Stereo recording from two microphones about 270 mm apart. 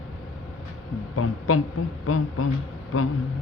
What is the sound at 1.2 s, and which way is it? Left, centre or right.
A woman's voice, left.